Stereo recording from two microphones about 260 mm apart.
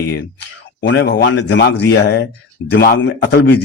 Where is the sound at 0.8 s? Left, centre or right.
Left.